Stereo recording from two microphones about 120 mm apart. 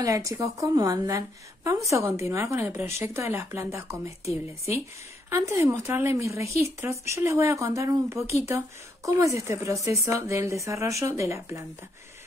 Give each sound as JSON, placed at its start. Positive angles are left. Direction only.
{"t": 0.0, "sound": "speech", "side_deg": -30}